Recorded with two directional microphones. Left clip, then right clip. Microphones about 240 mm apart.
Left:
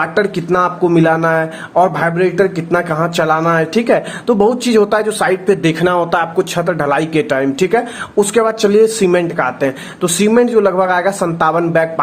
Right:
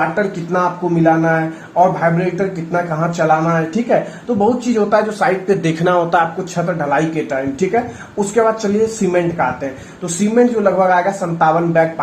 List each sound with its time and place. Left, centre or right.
0.5 s speech: left